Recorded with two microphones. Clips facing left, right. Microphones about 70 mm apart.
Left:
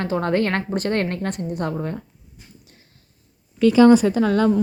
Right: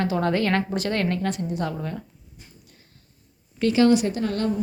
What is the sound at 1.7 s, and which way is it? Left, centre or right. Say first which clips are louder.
Speech: left 4 dB; left.